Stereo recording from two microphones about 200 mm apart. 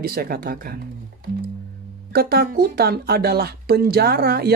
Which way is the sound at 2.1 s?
50° right (ahead or behind).